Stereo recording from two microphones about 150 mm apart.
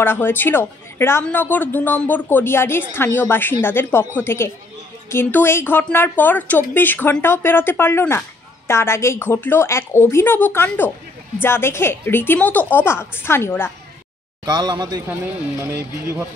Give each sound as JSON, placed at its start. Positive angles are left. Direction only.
{"t": 0.0, "sound": "speech", "side_deg": 15}
{"t": 14.4, "sound": "a man's voice", "side_deg": -30}
{"t": 15.6, "sound": "speech", "side_deg": -15}